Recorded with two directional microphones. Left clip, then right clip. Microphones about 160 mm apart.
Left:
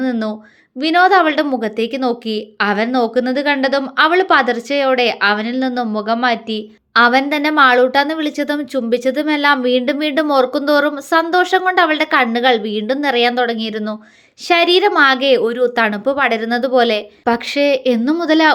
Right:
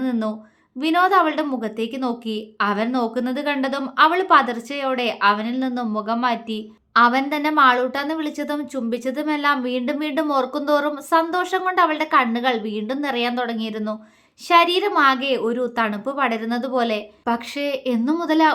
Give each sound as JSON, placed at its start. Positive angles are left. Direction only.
{"t": 0.0, "sound": "a woman's voice", "side_deg": 20}